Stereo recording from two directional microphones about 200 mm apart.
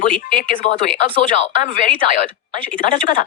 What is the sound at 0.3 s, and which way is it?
A man's voice, 40° left (ahead or behind).